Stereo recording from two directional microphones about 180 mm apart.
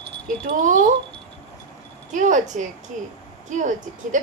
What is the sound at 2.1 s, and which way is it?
A woman's voice, 45° right (ahead or behind).